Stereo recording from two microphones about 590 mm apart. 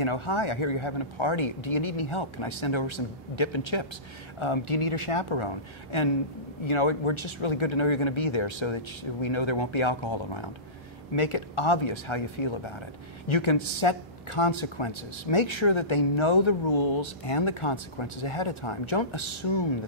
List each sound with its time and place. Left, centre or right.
0.0 s a woman's voice: left